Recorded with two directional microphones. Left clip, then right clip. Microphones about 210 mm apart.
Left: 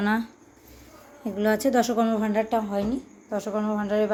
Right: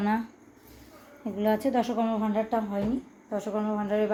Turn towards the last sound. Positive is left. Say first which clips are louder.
# left 3 dB
turn(degrees=10)  # may be behind; listen again after turning